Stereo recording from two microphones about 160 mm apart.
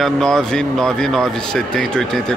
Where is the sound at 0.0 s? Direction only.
5° left (ahead or behind).